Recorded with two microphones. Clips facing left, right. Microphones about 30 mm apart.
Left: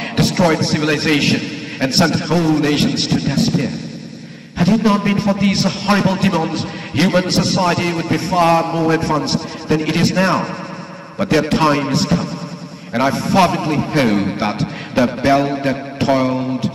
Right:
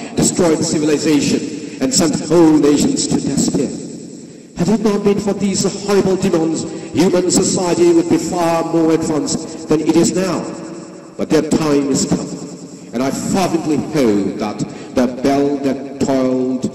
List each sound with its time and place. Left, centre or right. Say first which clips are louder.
0.1 s a man's voice: right 1 dB; left